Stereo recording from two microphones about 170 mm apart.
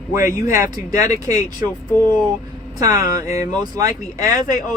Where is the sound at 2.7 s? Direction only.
20° right (ahead or behind).